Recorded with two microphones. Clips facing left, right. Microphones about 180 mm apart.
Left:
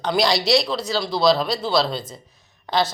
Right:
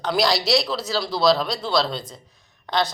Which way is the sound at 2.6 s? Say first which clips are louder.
Left 2 dB; 5° left (ahead or behind).